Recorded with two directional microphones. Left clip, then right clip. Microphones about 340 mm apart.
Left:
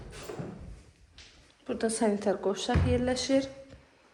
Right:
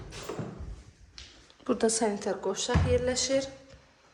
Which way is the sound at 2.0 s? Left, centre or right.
Centre.